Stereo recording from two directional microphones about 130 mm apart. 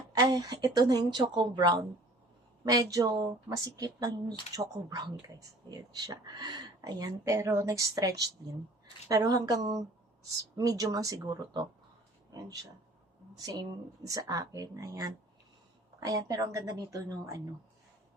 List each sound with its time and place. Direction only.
0.1 s speech: 30° right (ahead or behind)
13.4 s speech: 30° right (ahead or behind)